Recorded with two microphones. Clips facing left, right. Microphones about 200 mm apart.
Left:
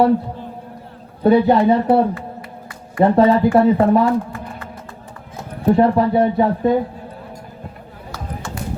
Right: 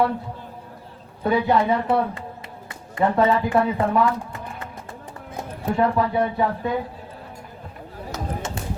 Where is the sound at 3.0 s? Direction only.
35° left (ahead or behind).